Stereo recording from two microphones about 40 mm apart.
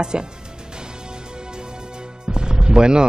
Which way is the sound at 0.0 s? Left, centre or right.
Right.